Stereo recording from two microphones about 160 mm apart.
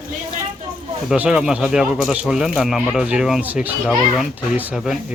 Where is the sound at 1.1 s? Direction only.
5° right (ahead or behind).